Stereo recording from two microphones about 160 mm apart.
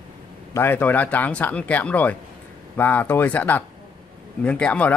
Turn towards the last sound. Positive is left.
turn(degrees=10)  # may be behind; listen again after turning